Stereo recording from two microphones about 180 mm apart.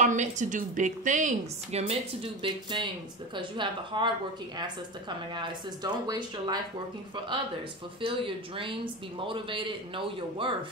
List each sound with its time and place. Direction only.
0.0 s a woman's voice: 45° right (ahead or behind); by 4.1 s 25° right (ahead or behind)
5.3 s speech: 25° right (ahead or behind)
8.0 s speech: 30° right (ahead or behind)